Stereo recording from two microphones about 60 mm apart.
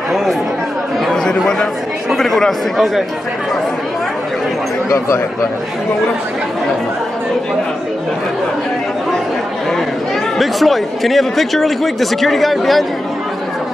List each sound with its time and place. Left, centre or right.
0.1 s chatter: centre
2.0 s speech: centre
4.8 s speech: left
10.4 s speech: centre